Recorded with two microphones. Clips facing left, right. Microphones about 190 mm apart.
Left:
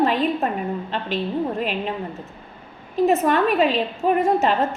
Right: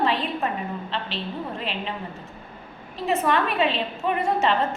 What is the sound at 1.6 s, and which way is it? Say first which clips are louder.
Speech: left 6 dB; 45° left (ahead or behind).